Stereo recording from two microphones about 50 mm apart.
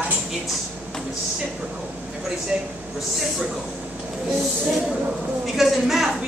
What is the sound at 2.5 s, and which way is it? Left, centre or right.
Speech, centre.